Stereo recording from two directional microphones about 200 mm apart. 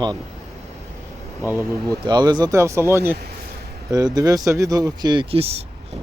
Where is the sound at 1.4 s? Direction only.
15° right (ahead or behind); by 5.6 s 30° right (ahead or behind).